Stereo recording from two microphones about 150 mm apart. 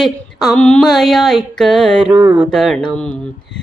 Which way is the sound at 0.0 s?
Centre (ahead or behind).